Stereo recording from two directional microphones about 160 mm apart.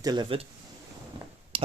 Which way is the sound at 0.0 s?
25° right (ahead or behind).